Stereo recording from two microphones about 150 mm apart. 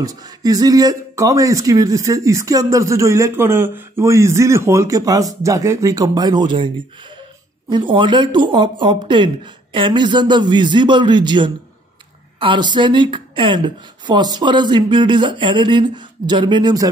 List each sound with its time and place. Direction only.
0.0 s speech: 25° right (ahead or behind)
7.7 s speech: 35° right (ahead or behind)